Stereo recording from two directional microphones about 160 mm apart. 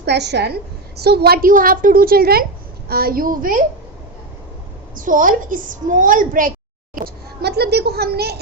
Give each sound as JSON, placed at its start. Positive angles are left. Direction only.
{"t": 0.0, "sound": "a woman's voice", "side_deg": -90}
{"t": 4.9, "sound": "a woman's voice", "side_deg": -55}
{"t": 7.0, "sound": "a child's voice", "side_deg": -90}